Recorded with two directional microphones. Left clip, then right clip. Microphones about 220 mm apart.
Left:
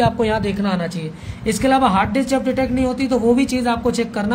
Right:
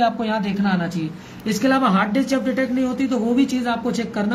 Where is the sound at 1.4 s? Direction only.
35° left (ahead or behind).